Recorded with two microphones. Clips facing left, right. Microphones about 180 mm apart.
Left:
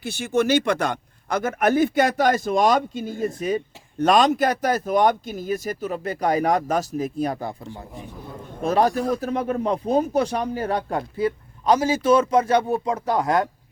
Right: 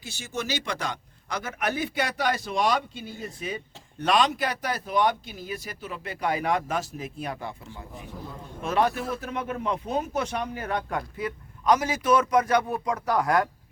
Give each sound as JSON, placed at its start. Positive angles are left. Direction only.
{"t": 0.0, "sound": "a man's voice", "side_deg": 55}
{"t": 8.6, "sound": "speech", "side_deg": 40}